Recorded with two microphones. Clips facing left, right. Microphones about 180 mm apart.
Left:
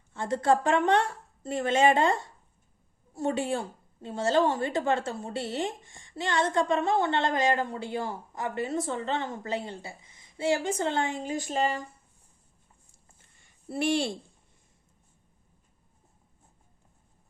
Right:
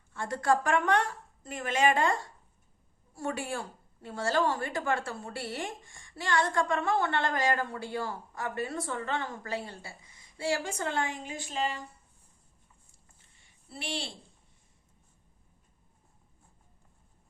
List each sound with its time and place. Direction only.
0.1 s a woman's voice: 20° left (ahead or behind); by 11.8 s 45° left (ahead or behind)
13.7 s speech: 50° left (ahead or behind)